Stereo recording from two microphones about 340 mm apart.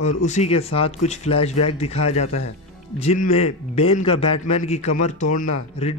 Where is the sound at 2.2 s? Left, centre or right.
Left.